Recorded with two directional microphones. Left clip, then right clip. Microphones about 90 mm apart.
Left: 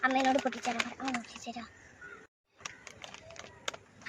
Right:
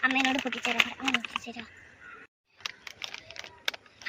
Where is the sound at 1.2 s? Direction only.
40° left (ahead or behind).